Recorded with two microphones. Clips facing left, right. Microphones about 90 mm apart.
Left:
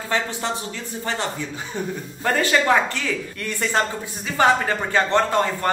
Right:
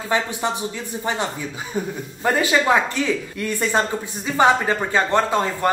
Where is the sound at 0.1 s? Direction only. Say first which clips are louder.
Right 2 dB; 15° right (ahead or behind).